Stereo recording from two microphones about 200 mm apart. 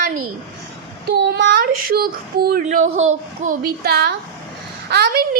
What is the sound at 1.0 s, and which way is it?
Child singing, 55° right (ahead or behind).